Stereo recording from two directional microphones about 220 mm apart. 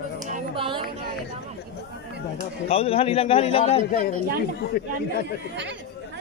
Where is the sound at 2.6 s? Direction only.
25° left (ahead or behind).